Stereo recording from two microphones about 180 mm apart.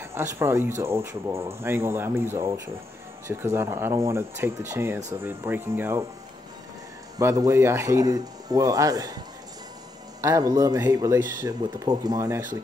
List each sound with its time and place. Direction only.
0.0 s speech: 15° right (ahead or behind)
7.2 s speech: 15° right (ahead or behind)
10.2 s speech: 20° right (ahead or behind)